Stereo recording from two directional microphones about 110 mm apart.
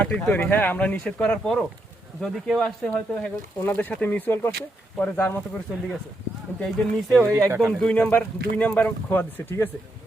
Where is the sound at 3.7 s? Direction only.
15° left (ahead or behind).